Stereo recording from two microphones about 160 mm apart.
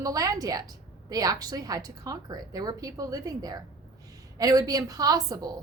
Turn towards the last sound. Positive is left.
turn(degrees=-25)  # may be behind; listen again after turning